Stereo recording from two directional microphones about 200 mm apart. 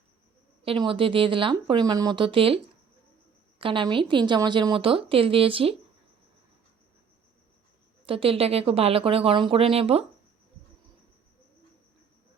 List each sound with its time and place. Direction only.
0.6 s speech: 25° right (ahead or behind)
3.6 s speech: 25° right (ahead or behind)
8.0 s speech: 25° right (ahead or behind)